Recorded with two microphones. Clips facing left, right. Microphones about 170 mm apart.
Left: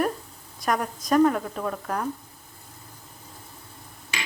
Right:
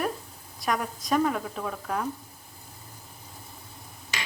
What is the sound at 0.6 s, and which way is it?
A woman's voice, centre (ahead or behind).